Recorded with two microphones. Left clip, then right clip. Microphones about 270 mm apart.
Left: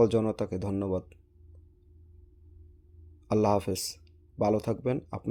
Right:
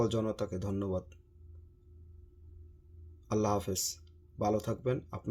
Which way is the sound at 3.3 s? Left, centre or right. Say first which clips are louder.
Left 6 dB; left.